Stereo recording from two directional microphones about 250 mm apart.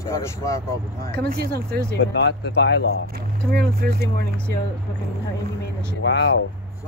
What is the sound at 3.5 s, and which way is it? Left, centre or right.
Speech, right.